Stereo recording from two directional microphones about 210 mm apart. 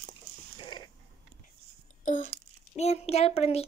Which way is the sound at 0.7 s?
20° left (ahead or behind).